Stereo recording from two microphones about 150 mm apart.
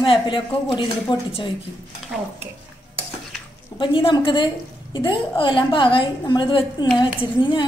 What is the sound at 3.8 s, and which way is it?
A woman's voice, 35° left (ahead or behind).